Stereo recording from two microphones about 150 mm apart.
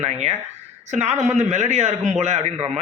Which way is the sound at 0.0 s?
45° right (ahead or behind).